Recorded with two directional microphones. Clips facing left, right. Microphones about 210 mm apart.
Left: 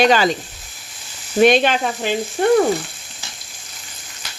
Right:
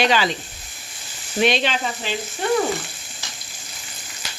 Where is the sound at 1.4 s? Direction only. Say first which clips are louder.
Left 7 dB; 50° left (ahead or behind).